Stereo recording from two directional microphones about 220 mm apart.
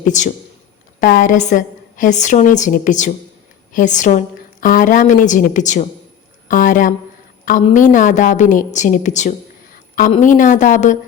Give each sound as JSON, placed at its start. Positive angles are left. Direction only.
{"t": 0.0, "sound": "a woman's voice", "side_deg": 35}